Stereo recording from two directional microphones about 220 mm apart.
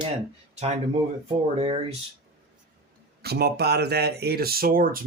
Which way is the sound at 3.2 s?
45° right (ahead or behind).